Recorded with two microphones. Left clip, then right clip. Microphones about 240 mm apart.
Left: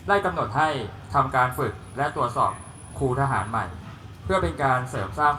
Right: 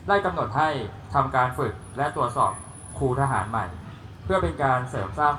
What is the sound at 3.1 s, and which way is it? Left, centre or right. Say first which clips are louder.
Speech: left 1 dB; left.